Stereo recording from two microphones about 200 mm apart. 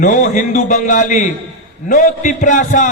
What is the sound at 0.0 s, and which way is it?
A man's voice, 40° left (ahead or behind).